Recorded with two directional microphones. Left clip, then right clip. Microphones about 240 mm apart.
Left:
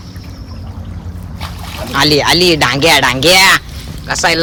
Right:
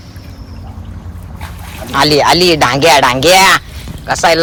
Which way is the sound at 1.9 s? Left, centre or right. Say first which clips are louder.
Right 2 dB; centre.